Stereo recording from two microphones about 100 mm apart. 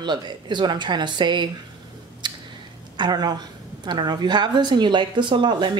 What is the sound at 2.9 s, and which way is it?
Speech, 45° right (ahead or behind).